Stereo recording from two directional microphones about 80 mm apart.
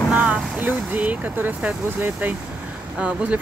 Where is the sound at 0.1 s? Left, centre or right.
Centre.